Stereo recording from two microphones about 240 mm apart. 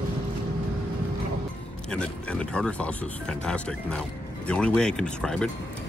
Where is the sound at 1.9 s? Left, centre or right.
Centre.